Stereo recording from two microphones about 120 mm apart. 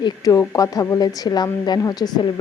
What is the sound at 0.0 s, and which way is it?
A woman's voice, 30° left (ahead or behind).